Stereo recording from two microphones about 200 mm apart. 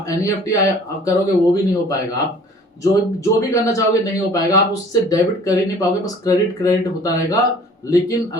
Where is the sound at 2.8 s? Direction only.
15° left (ahead or behind).